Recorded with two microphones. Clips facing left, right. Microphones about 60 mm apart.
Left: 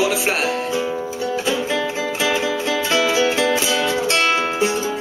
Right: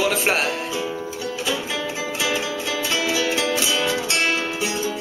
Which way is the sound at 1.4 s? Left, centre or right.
Left.